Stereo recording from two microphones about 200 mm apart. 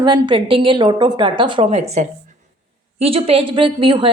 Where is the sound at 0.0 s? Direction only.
25° right (ahead or behind).